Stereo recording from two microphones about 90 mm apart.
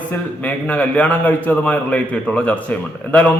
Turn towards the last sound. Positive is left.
turn(degrees=15)  # may be behind; listen again after turning